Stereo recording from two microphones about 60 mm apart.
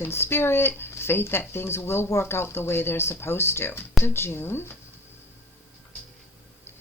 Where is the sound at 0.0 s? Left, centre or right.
Left.